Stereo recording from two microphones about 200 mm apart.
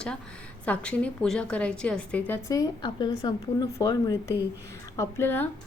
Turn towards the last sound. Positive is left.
turn(degrees=10)  # may be behind; listen again after turning